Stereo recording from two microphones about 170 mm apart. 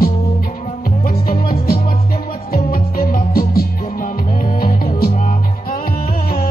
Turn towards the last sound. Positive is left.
turn(degrees=50)  # may be behind; listen again after turning